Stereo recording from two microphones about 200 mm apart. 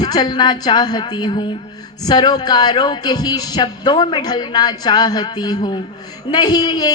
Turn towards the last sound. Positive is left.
turn(degrees=20)  # may be behind; listen again after turning